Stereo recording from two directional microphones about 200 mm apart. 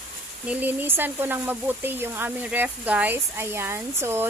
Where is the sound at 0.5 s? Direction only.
10° right (ahead or behind).